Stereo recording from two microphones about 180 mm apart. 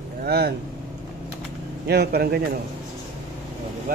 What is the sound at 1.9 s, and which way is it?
Speech, 65° right (ahead or behind).